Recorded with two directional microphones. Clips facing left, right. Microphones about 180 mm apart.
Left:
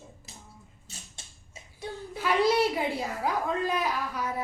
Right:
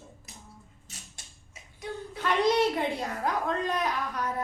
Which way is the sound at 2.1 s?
5° left (ahead or behind).